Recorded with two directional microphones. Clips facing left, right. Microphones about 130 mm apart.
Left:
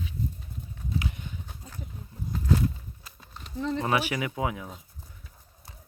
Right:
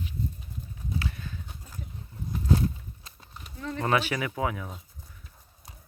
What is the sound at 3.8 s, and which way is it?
Speech, 10° left (ahead or behind).